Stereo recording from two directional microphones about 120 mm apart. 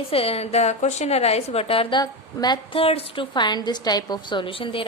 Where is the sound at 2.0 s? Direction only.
35° left (ahead or behind).